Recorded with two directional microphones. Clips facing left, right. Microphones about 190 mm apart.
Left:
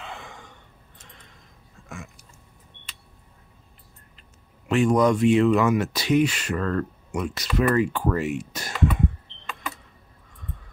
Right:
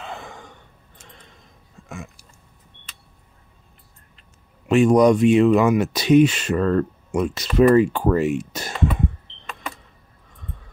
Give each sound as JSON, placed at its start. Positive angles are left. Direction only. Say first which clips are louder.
{"t": 0.0, "sound": "gasp", "louder": "right 4 dB", "side_deg": -40}
{"t": 4.6, "sound": "speech", "louder": "right 5 dB", "side_deg": -20}